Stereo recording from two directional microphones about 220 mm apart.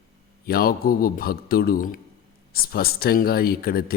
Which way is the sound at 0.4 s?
40° left (ahead or behind).